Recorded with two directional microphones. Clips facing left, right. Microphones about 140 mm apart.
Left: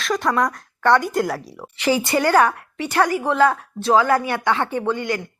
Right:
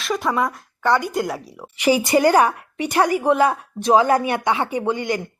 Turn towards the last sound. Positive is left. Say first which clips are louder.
# right 1 dB
turn(degrees=-15)  # may be behind; listen again after turning